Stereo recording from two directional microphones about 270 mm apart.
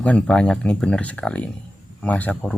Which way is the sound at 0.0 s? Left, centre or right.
Centre.